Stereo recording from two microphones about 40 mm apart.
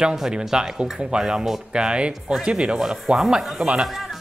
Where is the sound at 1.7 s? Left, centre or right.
Right.